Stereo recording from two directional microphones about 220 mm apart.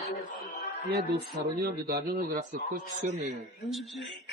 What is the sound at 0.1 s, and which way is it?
Music, 35° left (ahead or behind).